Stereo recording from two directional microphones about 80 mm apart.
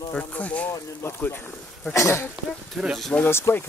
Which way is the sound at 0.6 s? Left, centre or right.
Left.